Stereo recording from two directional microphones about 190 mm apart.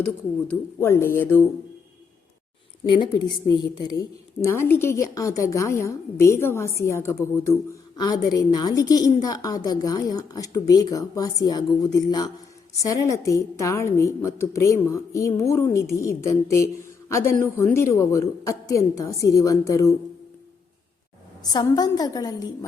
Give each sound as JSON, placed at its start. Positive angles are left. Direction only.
{"t": 0.0, "sound": "a woman's voice", "side_deg": 10}
{"t": 3.0, "sound": "a woman's voice", "side_deg": 25}
{"t": 21.5, "sound": "a woman's voice", "side_deg": 20}